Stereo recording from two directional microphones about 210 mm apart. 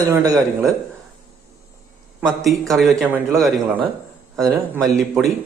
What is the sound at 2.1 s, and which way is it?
A man's voice, centre (ahead or behind).